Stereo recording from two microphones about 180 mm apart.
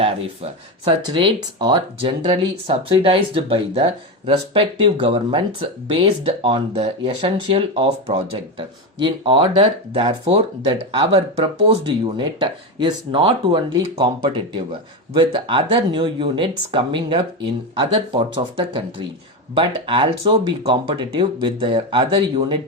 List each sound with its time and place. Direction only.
0.0 s speech: 30° right (ahead or behind)